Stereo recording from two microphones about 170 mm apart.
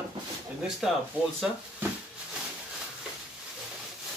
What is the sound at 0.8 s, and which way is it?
Speech, centre (ahead or behind).